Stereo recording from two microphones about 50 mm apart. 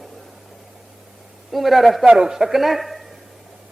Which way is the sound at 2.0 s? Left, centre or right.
Centre.